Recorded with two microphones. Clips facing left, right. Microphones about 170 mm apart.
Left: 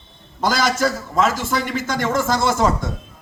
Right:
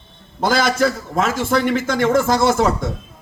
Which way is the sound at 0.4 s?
55° right (ahead or behind).